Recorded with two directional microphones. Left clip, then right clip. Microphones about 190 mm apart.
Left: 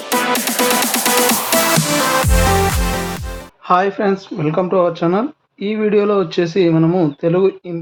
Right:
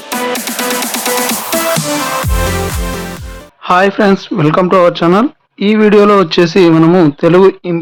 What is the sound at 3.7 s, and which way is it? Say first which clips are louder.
Speech: right 6 dB; 35° right (ahead or behind).